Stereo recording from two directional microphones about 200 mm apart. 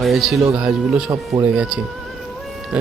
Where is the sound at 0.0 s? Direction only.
Centre (ahead or behind).